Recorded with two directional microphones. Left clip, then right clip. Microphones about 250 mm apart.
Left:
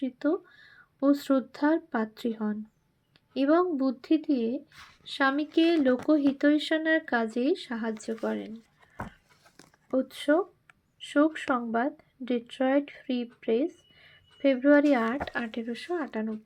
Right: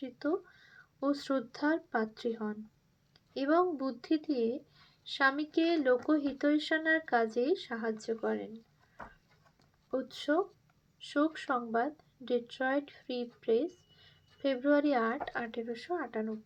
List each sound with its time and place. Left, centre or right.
0.0 s speech: left
9.9 s speech: left